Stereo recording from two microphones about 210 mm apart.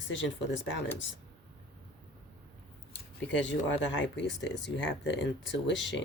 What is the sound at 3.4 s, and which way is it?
Speech, 60° left (ahead or behind).